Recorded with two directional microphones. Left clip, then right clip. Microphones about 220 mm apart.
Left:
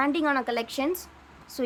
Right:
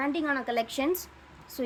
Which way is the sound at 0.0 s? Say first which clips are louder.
Left 4 dB; 10° left (ahead or behind).